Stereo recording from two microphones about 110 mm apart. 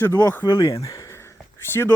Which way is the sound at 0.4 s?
40° left (ahead or behind).